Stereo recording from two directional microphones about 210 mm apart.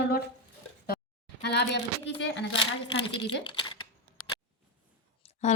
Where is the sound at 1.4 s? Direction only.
55° left (ahead or behind).